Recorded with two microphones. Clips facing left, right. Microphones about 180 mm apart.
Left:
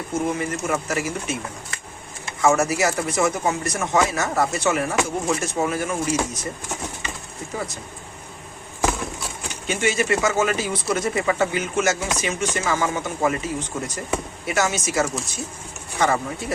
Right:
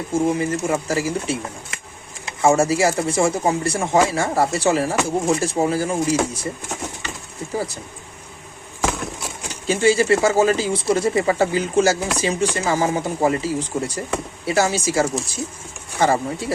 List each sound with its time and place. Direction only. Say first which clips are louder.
0.1 s speech: right 5 dB; 30° right (ahead or behind)
2.4 s speech: right 3 dB; 30° right (ahead or behind)
9.5 s speech: right 7 dB; 35° right (ahead or behind)